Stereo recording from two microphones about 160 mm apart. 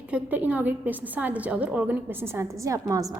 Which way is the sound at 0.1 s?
10° right (ahead or behind).